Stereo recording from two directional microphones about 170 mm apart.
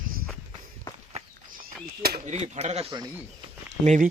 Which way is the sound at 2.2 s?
40° right (ahead or behind).